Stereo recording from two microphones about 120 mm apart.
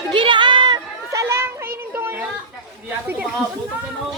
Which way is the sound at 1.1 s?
25° right (ahead or behind).